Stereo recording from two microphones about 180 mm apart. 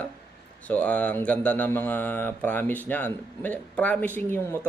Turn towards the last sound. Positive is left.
turn(degrees=15)  # may be behind; listen again after turning